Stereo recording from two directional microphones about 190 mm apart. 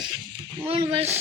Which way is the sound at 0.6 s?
30° right (ahead or behind).